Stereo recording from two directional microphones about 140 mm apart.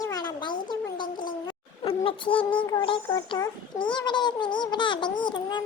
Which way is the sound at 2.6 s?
35° left (ahead or behind).